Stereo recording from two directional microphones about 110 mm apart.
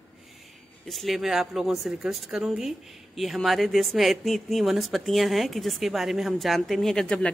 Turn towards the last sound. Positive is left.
turn(degrees=10)  # may be behind; listen again after turning